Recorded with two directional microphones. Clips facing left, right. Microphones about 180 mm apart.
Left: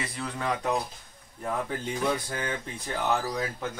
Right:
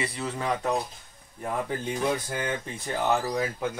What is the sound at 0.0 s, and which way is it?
Speech, 5° right (ahead or behind).